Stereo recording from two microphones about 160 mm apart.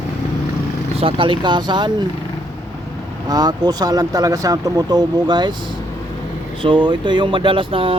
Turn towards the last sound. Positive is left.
turn(degrees=-35)  # may be behind; listen again after turning